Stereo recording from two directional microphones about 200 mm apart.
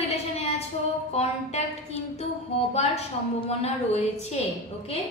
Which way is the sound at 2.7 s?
30° left (ahead or behind).